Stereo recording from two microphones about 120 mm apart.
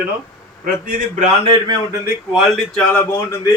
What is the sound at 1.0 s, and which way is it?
Speech, 90° right.